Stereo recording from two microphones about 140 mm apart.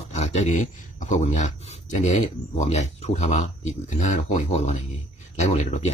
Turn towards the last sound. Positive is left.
turn(degrees=55)  # may be behind; listen again after turning